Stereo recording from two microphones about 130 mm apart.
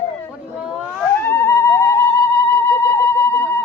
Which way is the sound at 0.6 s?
5° right (ahead or behind).